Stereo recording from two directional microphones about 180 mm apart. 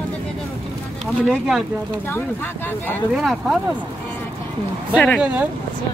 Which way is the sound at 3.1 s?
5° right (ahead or behind).